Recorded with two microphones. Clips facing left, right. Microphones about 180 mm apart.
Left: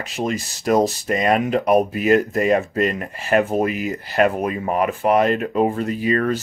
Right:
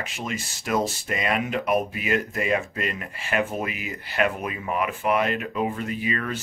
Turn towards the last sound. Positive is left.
turn(degrees=40)  # may be behind; listen again after turning